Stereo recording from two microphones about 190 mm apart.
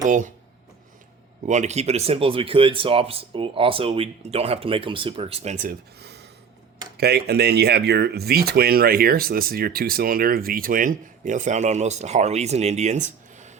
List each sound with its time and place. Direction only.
1.5 s speech: 40° right (ahead or behind)
6.0 s a sound: 60° right (ahead or behind)
6.9 s speech: 55° right (ahead or behind); by 13.5 s 40° right (ahead or behind)